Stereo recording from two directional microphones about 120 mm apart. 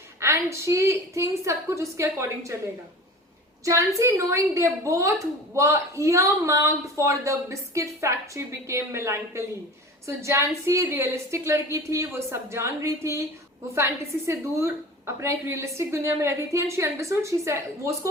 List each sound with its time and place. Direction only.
0.2 s a woman's voice: 25° right (ahead or behind)
3.6 s a woman's voice: 25° right (ahead or behind)